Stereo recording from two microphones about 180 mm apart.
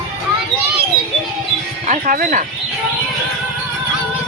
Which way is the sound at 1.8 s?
45° right (ahead or behind).